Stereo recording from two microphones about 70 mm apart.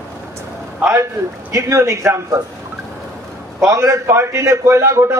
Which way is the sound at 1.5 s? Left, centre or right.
Right.